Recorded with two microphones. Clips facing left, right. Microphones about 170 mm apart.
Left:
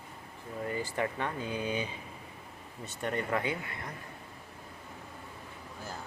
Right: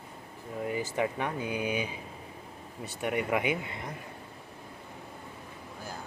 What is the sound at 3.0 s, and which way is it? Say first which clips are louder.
Speech: right 3 dB; 10° right (ahead or behind).